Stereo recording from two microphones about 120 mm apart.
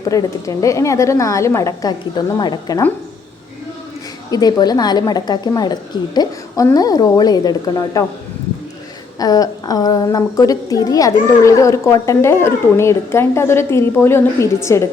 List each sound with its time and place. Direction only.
0.0 s a woman's voice: 30° left (ahead or behind)
4.3 s a woman's voice: 35° left (ahead or behind)
6.7 s a woman's voice: 30° left (ahead or behind)
9.1 s a woman's voice: 30° left (ahead or behind)